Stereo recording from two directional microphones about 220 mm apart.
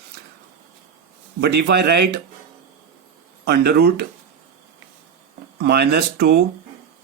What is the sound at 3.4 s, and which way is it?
Speech, 45° right (ahead or behind).